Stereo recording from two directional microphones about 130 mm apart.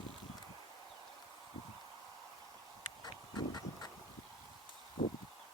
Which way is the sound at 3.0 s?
30° left (ahead or behind).